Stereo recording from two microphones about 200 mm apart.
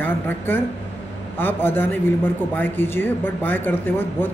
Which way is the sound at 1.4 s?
10° left (ahead or behind).